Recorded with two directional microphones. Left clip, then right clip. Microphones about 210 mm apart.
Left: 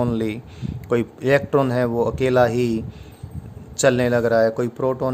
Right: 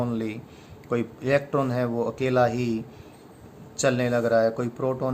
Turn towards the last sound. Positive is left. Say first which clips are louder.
# left 5 dB
turn(degrees=45)  # may be behind; listen again after turning